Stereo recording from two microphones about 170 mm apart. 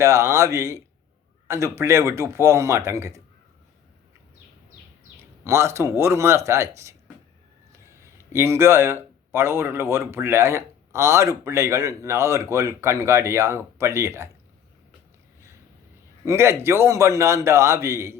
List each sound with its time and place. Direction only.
0.0 s speech: 15° right (ahead or behind)
5.5 s speech: 15° right (ahead or behind)
16.2 s speech: 15° right (ahead or behind)